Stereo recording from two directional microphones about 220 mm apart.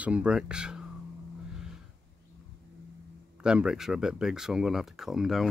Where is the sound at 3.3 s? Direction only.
5° right (ahead or behind).